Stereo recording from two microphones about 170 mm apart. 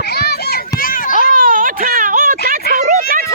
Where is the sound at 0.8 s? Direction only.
55° left (ahead or behind).